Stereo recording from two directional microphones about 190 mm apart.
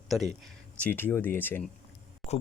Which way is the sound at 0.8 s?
10° left (ahead or behind).